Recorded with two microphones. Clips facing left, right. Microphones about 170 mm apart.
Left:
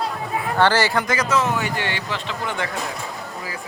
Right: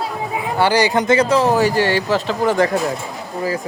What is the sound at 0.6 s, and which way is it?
A man's voice, 15° right (ahead or behind).